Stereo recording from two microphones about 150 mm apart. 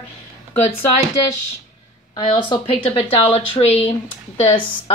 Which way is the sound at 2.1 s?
35° left (ahead or behind).